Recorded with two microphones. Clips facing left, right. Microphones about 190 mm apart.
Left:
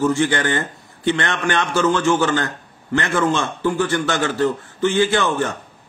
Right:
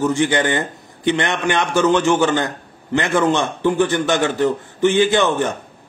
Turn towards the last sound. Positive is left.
turn(degrees=-20)  # may be behind; listen again after turning